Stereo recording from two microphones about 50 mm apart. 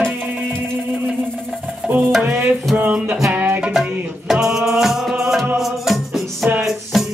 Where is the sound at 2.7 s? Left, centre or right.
Centre.